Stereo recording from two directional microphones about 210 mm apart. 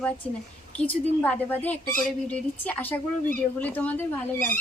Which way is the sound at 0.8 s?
5° left (ahead or behind).